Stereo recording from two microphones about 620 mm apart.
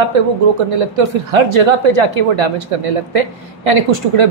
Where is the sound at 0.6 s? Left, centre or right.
Right.